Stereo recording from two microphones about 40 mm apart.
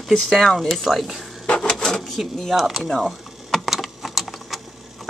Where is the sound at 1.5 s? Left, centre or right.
Centre.